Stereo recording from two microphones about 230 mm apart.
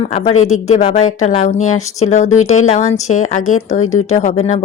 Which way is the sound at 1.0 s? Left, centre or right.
Left.